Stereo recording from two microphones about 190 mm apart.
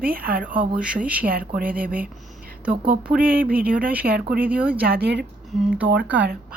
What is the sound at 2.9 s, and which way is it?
Speech, 50° right (ahead or behind).